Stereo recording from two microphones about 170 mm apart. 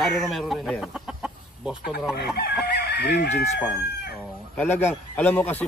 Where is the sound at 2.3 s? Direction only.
70° left (ahead or behind).